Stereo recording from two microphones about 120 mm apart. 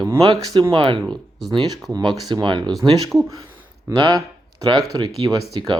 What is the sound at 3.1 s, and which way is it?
Speech, 15° right (ahead or behind).